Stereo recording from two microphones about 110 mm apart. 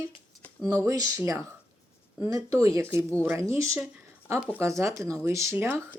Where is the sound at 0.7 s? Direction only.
30° right (ahead or behind).